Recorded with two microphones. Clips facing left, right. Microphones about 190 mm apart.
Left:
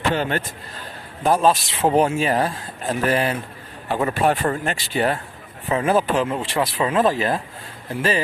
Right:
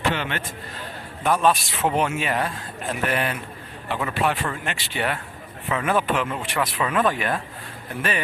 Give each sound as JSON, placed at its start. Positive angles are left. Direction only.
{"t": 0.1, "sound": "a man's voice", "side_deg": 40}